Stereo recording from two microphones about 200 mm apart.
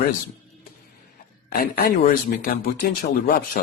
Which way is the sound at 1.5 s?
50° left (ahead or behind).